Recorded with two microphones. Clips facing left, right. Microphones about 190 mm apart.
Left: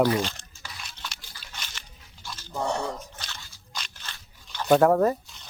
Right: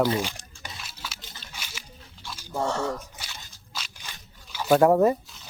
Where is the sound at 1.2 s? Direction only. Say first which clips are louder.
Right 4 dB; 20° right (ahead or behind).